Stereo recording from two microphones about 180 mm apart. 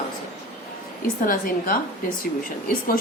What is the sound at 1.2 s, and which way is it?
Speech, 50° left (ahead or behind).